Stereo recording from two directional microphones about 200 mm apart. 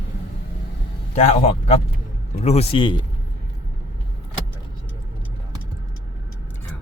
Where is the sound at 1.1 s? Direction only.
35° left (ahead or behind).